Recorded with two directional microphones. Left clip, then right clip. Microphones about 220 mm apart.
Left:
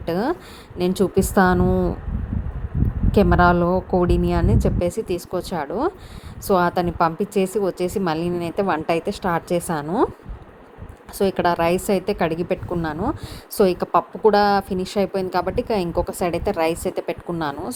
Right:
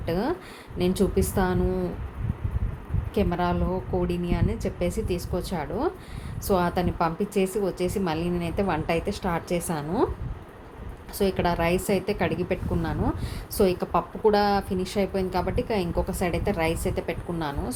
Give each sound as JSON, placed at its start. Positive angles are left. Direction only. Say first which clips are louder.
{"t": 0.0, "sound": "a woman's voice", "louder": "left 5 dB", "side_deg": 30}
{"t": 3.1, "sound": "a woman's voice", "louder": "left 10 dB", "side_deg": 35}
{"t": 11.2, "sound": "a woman's voice", "louder": "left 6 dB", "side_deg": 30}